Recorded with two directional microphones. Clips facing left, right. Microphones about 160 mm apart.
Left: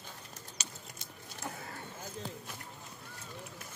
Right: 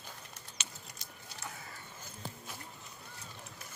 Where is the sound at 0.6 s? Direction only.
40° left (ahead or behind).